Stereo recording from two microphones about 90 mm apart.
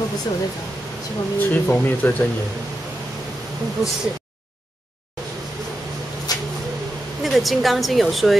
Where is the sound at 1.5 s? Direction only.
20° left (ahead or behind).